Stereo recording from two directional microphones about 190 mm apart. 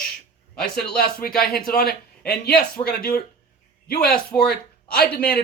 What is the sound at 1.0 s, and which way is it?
Speech, 50° left (ahead or behind).